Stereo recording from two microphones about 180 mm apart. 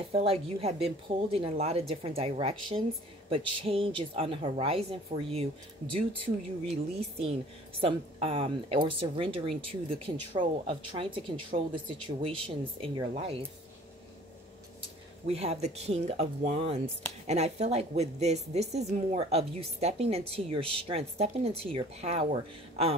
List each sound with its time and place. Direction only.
0.1 s a woman's voice: 35° right (ahead or behind)
14.8 s a woman's voice: 35° right (ahead or behind)